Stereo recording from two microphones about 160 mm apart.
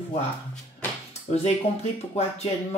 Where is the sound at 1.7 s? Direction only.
40° left (ahead or behind).